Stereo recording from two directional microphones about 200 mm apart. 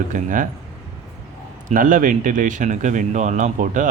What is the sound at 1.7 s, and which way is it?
Speech, 40° right (ahead or behind).